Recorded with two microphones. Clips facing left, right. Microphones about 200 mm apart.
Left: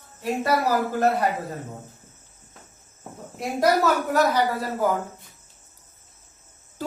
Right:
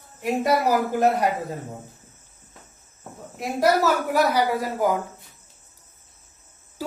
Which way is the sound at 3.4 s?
5° right (ahead or behind).